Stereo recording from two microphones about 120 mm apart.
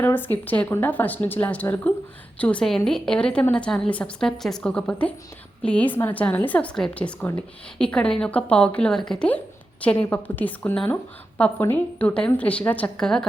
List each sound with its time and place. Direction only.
0.0 s a woman's voice: 15° left (ahead or behind)